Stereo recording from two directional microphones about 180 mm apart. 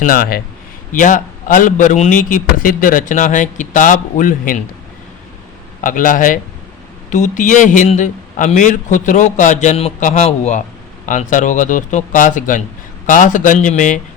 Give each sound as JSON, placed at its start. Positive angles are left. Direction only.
{"t": 0.0, "sound": "a man's voice", "side_deg": 50}
{"t": 5.8, "sound": "a man's voice", "side_deg": 50}